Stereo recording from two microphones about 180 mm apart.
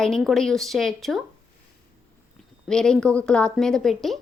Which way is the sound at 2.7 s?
5° left (ahead or behind).